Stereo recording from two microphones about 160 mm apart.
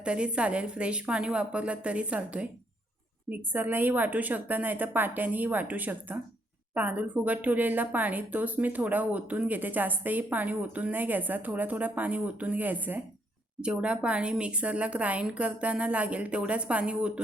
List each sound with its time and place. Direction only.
0.0 s speech: 5° right (ahead or behind)